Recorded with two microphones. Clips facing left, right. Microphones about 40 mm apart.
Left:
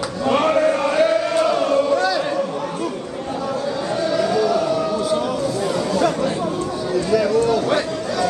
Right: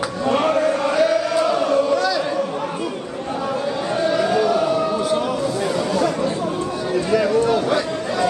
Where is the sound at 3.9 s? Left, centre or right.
Centre.